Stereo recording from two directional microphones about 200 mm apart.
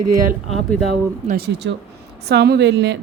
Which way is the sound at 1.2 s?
50° right (ahead or behind).